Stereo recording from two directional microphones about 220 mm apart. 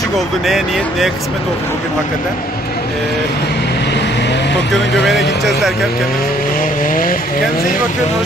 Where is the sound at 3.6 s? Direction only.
50° left (ahead or behind).